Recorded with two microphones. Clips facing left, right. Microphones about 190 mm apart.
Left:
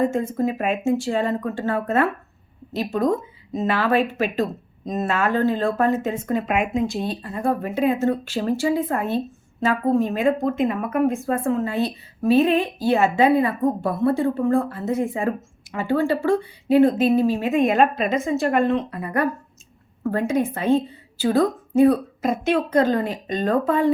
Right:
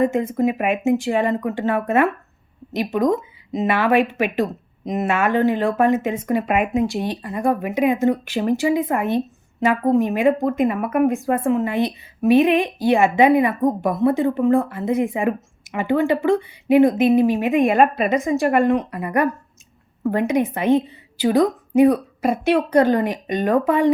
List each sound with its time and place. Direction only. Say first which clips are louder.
0.0 s a woman's voice: right 3 dB; 15° right (ahead or behind)
20.1 s a woman's voice: right 2 dB; 15° right (ahead or behind)